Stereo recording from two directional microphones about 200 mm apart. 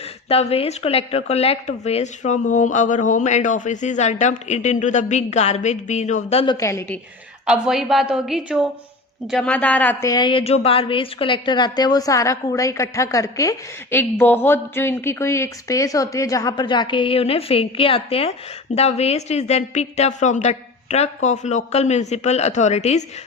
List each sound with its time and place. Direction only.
0.3 s a woman's voice: 30° left (ahead or behind)
6.4 s a woman's voice: 20° left (ahead or behind)
7.4 s a woman's voice: 5° right (ahead or behind); by 23.0 s 35° left (ahead or behind)